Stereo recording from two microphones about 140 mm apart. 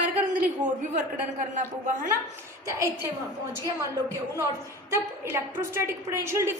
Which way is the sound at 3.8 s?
20° right (ahead or behind).